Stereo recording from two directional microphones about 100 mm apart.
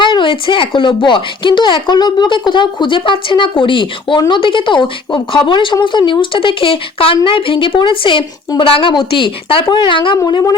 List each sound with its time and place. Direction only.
0.0 s speech: 55° left (ahead or behind)